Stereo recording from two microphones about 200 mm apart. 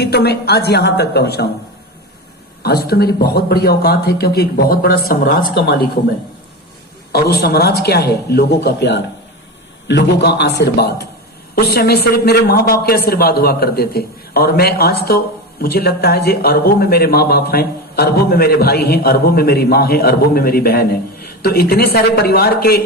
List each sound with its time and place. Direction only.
0.0 s speech: 55° left (ahead or behind)
2.6 s speech: 50° left (ahead or behind)
7.1 s a man's voice: 50° left (ahead or behind)